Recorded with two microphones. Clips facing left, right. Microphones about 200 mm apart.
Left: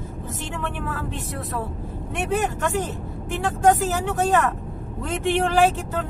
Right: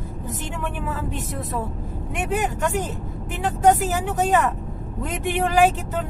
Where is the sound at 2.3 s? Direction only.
15° right (ahead or behind).